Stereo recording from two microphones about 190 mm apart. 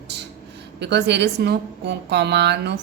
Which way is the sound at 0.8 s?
65° right (ahead or behind).